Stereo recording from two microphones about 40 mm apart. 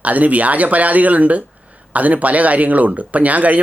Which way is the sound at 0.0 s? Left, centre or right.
Right.